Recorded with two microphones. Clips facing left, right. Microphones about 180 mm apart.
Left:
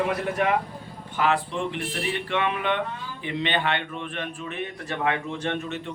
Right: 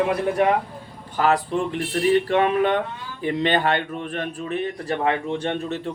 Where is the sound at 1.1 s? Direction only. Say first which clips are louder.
Right 4 dB; 40° right (ahead or behind).